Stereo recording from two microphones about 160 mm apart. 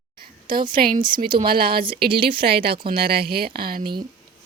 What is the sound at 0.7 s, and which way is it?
A woman's voice, 65° right (ahead or behind).